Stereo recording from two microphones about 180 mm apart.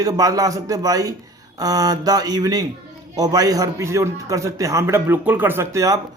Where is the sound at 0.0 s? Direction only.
20° right (ahead or behind).